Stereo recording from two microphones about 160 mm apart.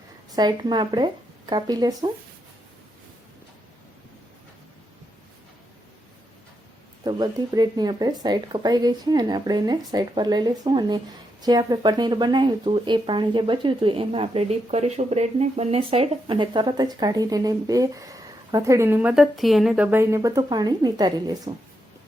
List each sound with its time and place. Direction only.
0.3 s speech: 25° right (ahead or behind)
7.0 s speech: 25° right (ahead or behind)